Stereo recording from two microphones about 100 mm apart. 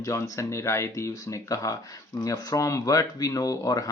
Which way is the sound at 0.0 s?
30° left (ahead or behind).